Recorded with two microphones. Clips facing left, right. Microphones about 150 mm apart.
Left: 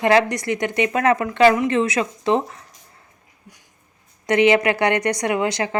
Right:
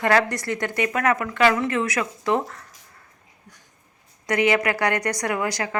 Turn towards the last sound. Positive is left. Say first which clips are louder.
# left 4 dB
turn(degrees=25)  # may be behind; listen again after turning